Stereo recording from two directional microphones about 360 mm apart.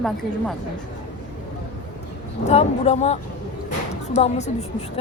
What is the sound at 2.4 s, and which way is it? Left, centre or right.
A woman's voice, centre.